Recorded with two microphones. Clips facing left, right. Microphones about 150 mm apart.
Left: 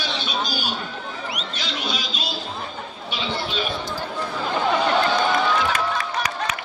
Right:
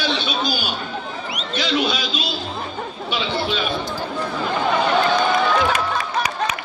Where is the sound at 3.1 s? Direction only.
75° right (ahead or behind).